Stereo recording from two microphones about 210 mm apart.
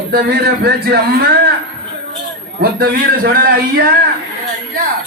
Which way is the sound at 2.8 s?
45° right (ahead or behind).